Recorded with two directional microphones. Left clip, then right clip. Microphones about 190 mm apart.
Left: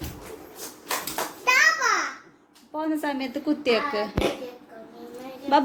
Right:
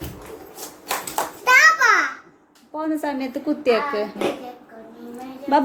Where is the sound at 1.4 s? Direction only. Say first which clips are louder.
Right 6 dB; 55° right (ahead or behind).